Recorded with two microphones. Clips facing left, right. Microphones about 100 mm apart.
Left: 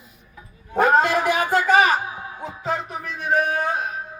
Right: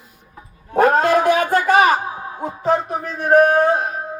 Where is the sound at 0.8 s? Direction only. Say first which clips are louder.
Right 2 dB; 50° right (ahead or behind).